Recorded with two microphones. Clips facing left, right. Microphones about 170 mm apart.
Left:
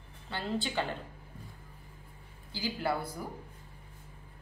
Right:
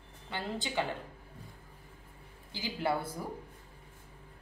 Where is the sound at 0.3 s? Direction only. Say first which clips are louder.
Left 3 dB; 15° right (ahead or behind).